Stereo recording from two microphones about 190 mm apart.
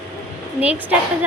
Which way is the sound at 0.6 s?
10° right (ahead or behind).